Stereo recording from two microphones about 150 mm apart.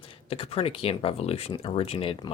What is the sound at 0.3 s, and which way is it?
A man's voice, 40° left (ahead or behind).